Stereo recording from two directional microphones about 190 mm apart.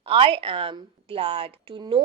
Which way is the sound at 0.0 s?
30° right (ahead or behind).